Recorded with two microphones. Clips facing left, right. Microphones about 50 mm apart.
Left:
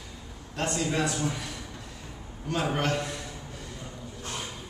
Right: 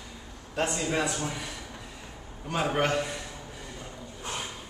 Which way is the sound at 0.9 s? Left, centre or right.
Centre.